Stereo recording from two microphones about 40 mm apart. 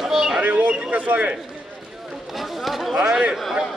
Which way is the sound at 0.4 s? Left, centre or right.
Right.